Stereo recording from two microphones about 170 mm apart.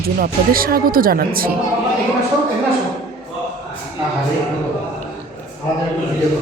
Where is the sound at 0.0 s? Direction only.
60° right (ahead or behind).